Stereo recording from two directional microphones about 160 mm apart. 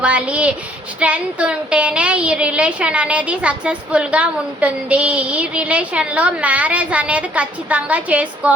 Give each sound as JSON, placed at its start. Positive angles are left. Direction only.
{"t": 0.0, "sound": "a woman's voice", "side_deg": -10}